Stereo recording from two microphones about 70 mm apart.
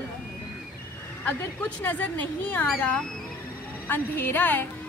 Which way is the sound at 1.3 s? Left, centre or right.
Left.